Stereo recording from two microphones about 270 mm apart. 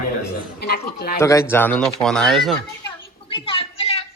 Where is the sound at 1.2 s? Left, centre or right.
Centre.